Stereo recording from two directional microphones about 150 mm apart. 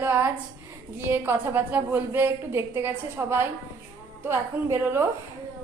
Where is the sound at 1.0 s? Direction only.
15° right (ahead or behind).